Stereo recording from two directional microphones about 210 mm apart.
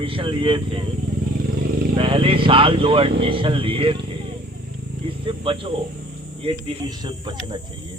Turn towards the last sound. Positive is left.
turn(degrees=-20)  # may be behind; listen again after turning